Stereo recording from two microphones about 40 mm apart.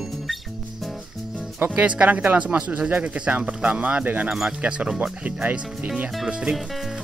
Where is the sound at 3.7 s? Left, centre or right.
Right.